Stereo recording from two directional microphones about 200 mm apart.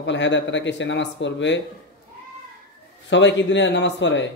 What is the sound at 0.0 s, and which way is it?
A man's voice, 65° left (ahead or behind).